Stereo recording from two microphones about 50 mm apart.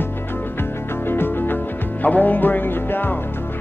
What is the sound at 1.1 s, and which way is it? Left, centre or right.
Music, left.